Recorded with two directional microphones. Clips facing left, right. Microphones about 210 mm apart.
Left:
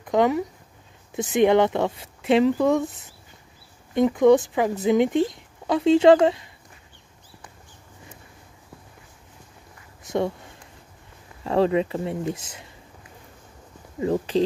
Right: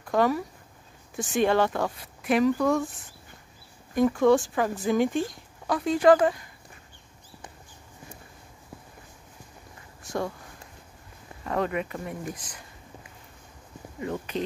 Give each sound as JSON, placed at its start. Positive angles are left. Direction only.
{"t": 0.0, "sound": "speech", "side_deg": 20}
{"t": 10.0, "sound": "a sound", "side_deg": 20}
{"t": 11.4, "sound": "speech", "side_deg": 30}
{"t": 13.9, "sound": "speech", "side_deg": 30}